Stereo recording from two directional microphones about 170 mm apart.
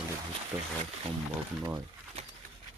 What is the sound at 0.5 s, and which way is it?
Speech, 25° right (ahead or behind).